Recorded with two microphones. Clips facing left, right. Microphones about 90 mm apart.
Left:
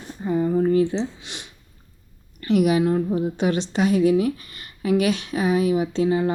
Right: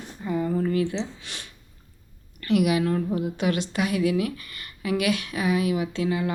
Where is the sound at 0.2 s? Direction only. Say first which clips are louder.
Left 5 dB; 30° left (ahead or behind).